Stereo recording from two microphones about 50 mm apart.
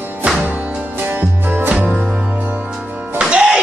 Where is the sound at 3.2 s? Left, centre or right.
Centre.